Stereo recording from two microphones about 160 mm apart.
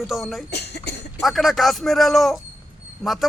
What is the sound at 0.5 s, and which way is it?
Speech, 90° left.